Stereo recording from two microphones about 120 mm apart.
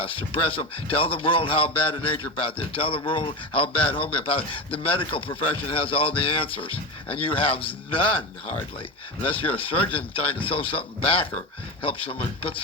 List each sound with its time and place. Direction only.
0.0 s a man's voice: 50° left (ahead or behind)